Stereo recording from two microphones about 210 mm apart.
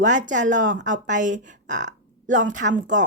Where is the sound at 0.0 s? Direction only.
35° right (ahead or behind).